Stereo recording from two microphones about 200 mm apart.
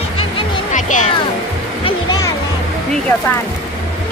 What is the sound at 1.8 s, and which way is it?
Music, 20° left (ahead or behind).